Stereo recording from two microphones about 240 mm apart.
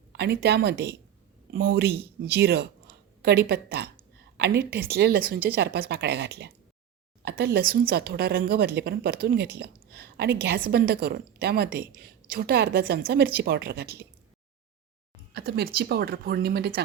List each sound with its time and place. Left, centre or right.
0.1 s a woman's voice: right
15.3 s a woman's voice: right